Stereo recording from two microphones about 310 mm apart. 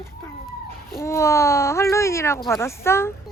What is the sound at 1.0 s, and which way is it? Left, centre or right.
Speech, centre.